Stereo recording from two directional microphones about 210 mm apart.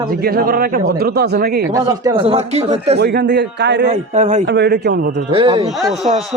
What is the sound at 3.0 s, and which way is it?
Speech, 50° right (ahead or behind).